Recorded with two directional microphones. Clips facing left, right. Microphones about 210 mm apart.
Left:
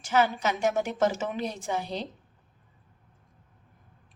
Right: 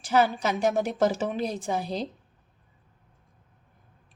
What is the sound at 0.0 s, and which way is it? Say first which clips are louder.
A woman's voice: right 2 dB; 35° right (ahead or behind).